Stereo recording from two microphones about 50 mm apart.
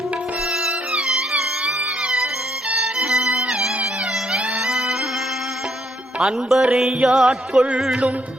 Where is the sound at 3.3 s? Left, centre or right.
Right.